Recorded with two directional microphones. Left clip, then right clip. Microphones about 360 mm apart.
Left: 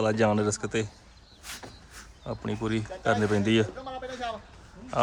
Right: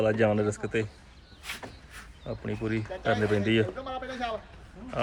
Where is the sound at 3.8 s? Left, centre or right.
Right.